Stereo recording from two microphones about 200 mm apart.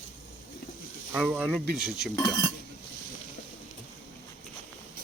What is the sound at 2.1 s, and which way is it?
Speech, 20° left (ahead or behind).